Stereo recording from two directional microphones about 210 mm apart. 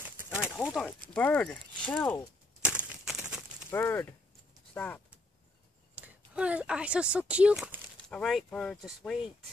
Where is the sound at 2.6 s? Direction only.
5° right (ahead or behind).